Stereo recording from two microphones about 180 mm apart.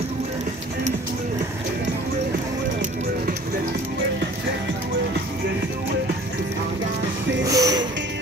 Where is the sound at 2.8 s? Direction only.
45° right (ahead or behind).